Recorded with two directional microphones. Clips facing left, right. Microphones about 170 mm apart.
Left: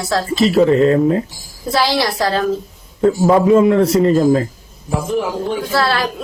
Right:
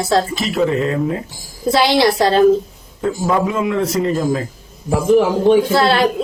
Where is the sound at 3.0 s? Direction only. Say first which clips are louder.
Left 5 dB; 35° left (ahead or behind).